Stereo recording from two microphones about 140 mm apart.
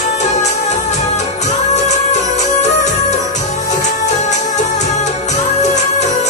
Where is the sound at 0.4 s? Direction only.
55° left (ahead or behind).